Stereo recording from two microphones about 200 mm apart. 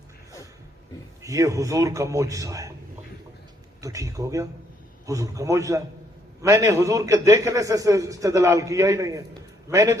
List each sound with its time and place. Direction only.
1.2 s a man's voice: 15° right (ahead or behind)
3.8 s a man's voice: 15° right (ahead or behind)